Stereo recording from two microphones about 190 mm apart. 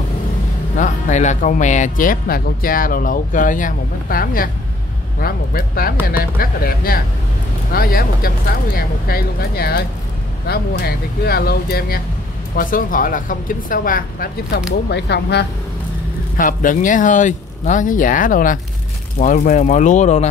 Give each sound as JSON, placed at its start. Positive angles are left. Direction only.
{"t": 0.7, "sound": "speech", "side_deg": 40}
{"t": 14.9, "sound": "speech", "side_deg": 60}
{"t": 16.3, "sound": "speech", "side_deg": 45}